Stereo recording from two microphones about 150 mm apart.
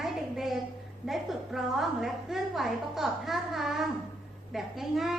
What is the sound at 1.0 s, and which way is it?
A woman's voice, centre (ahead or behind).